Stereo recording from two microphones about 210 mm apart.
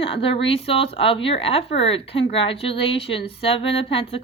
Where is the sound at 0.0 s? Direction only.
25° left (ahead or behind).